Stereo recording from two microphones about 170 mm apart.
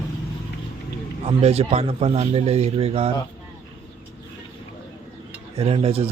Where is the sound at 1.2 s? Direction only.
40° right (ahead or behind).